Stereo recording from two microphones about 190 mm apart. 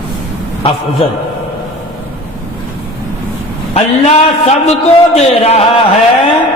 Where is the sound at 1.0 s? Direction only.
30° left (ahead or behind).